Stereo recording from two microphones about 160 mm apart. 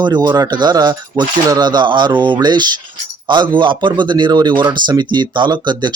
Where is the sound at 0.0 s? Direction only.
25° right (ahead or behind).